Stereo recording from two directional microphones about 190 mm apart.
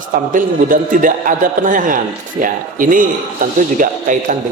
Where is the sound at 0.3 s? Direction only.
45° right (ahead or behind).